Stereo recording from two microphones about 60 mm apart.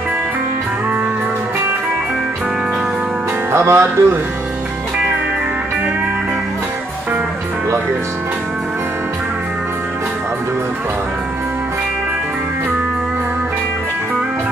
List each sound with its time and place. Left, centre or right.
3.5 s speech: right